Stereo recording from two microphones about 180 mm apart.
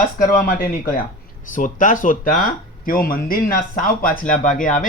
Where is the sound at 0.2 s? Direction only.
55° left (ahead or behind).